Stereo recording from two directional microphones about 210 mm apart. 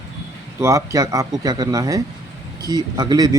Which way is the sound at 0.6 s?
15° right (ahead or behind).